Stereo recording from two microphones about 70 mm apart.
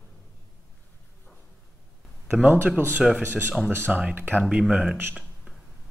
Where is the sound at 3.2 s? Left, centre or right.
Right.